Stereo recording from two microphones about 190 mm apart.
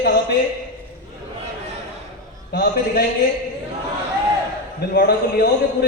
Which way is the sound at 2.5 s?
60° left (ahead or behind).